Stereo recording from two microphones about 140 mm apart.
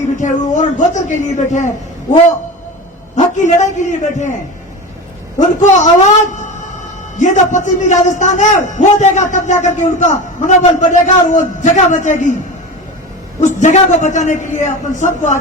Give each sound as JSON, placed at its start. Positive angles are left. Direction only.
{"t": 0.2, "sound": "a man's voice", "side_deg": 60}
{"t": 3.2, "sound": "a man's voice", "side_deg": 60}
{"t": 5.4, "sound": "a man's voice", "side_deg": 60}
{"t": 13.4, "sound": "a man's voice", "side_deg": 60}